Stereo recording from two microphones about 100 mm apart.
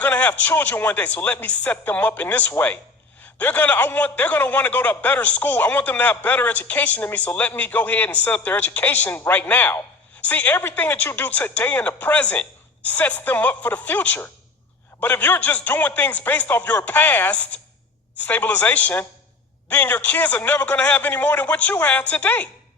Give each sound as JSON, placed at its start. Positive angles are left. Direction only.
{"t": 0.0, "sound": "a man's voice", "side_deg": 15}